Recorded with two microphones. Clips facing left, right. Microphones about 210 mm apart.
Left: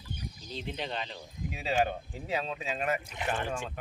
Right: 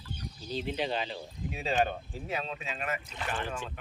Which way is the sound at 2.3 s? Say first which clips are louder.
Left 3 dB; 35° left (ahead or behind).